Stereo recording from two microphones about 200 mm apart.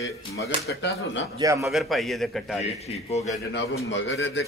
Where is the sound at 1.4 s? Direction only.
15° right (ahead or behind).